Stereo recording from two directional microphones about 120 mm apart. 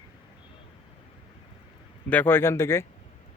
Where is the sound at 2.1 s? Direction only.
15° left (ahead or behind).